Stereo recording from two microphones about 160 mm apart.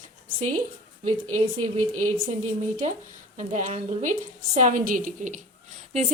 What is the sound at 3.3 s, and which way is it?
Speech, 50° right (ahead or behind).